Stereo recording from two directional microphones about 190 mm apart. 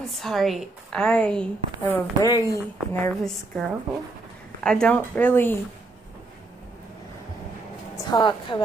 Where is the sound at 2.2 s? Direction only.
20° left (ahead or behind).